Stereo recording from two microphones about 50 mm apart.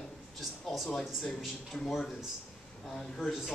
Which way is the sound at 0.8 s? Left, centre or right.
Centre.